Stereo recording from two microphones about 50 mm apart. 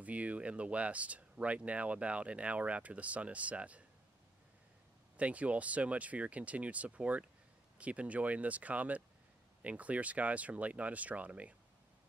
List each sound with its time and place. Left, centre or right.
0.0 s speech: right
5.1 s speech: right